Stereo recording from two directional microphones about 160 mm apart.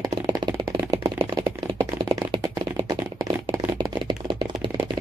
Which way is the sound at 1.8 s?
25° right (ahead or behind).